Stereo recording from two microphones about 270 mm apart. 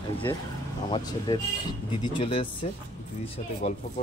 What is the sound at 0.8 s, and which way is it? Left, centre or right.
Speech, centre.